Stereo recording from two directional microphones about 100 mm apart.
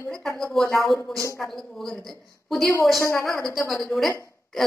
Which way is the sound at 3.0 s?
25° left (ahead or behind).